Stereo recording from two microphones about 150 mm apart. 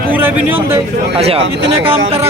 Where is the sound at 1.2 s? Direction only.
40° right (ahead or behind).